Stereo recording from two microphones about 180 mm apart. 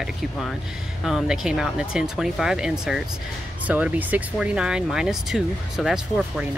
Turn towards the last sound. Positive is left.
turn(degrees=-5)  # may be behind; listen again after turning